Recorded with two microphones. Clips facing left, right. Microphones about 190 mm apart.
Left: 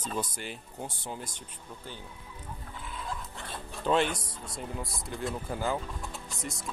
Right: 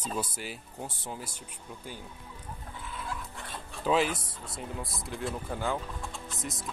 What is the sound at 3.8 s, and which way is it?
Speech, 5° right (ahead or behind).